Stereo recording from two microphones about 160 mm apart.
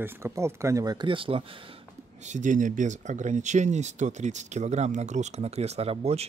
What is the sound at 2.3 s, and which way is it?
Speech, 50° right (ahead or behind).